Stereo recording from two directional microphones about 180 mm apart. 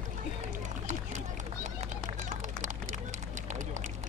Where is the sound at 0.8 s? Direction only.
45° right (ahead or behind).